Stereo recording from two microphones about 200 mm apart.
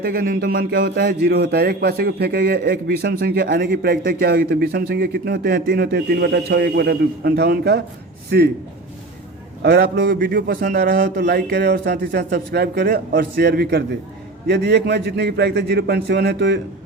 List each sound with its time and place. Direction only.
0.0 s a man's voice: 45° right (ahead or behind)
9.6 s a man's voice: 55° right (ahead or behind)